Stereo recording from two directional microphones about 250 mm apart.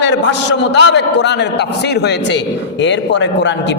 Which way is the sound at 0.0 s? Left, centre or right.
Left.